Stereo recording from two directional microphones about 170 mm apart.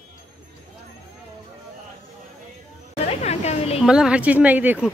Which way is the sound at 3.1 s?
40° left (ahead or behind).